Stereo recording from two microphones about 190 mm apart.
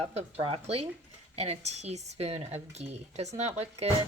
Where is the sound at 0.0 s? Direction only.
30° right (ahead or behind).